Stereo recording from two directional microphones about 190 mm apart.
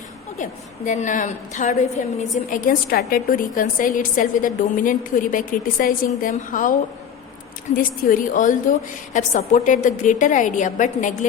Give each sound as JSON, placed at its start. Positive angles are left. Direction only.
{"t": 0.9, "sound": "a woman's voice", "side_deg": 40}
{"t": 7.8, "sound": "a woman's voice", "side_deg": 45}